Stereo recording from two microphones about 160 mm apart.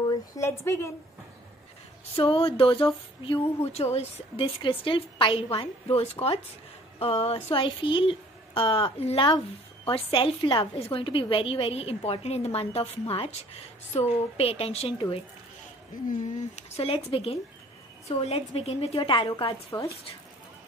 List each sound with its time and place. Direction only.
0.3 s a woman's voice: 15° left (ahead or behind)
2.1 s a woman's voice: 35° left (ahead or behind)